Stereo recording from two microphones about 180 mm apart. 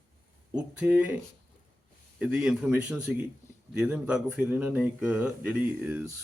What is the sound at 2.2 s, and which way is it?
A man's voice, 5° right (ahead or behind).